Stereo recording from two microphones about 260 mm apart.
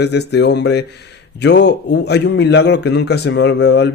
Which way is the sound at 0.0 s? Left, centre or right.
Left.